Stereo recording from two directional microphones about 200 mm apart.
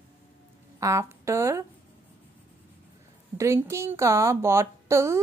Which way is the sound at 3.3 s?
15° right (ahead or behind).